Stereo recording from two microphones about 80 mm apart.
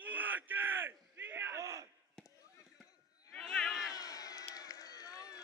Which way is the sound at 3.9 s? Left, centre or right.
Left.